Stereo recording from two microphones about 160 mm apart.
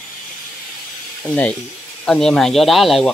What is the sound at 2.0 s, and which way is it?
Speech, 5° left (ahead or behind).